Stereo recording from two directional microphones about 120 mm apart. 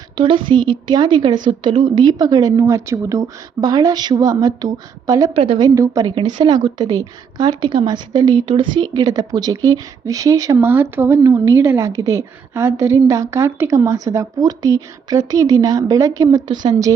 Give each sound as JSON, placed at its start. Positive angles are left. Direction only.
{"t": 0.2, "sound": "a woman's voice", "side_deg": -45}
{"t": 6.1, "sound": "a woman's voice", "side_deg": -45}